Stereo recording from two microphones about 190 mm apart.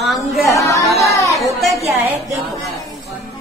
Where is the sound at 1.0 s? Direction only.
15° left (ahead or behind).